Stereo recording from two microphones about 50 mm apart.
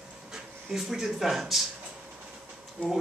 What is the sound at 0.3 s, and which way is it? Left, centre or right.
Speech, centre.